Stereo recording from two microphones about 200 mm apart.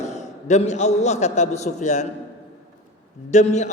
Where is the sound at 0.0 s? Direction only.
35° left (ahead or behind).